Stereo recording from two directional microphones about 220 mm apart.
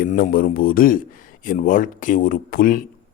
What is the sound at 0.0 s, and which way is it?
Speech, 40° left (ahead or behind).